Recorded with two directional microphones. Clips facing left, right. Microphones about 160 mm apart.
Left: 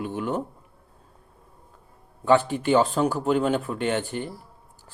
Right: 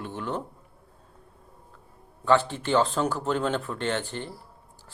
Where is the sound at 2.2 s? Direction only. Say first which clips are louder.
Left 3 dB; 15° left (ahead or behind).